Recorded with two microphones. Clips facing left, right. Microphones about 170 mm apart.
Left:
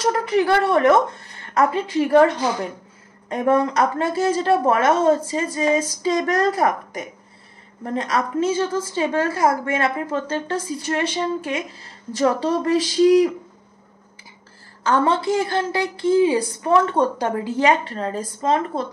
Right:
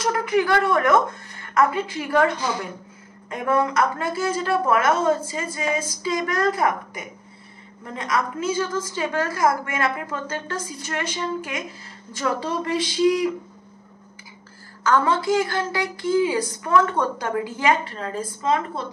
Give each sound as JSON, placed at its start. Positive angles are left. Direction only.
{"t": 0.0, "sound": "a woman's voice", "side_deg": 35}
{"t": 14.8, "sound": "speech", "side_deg": 30}